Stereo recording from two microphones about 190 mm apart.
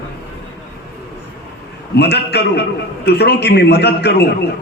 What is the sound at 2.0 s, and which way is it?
A man's voice, 60° left (ahead or behind).